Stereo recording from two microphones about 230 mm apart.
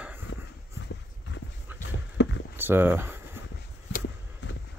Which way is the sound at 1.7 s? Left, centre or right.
Centre.